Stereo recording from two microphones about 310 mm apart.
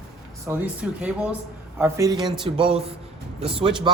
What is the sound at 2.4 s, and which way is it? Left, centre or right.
A man's voice, centre.